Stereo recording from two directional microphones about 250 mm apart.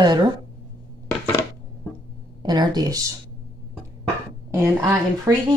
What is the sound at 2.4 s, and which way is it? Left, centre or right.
Speech, centre.